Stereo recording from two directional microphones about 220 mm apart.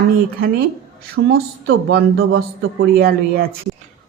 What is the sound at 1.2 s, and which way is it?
Speech, 65° right (ahead or behind).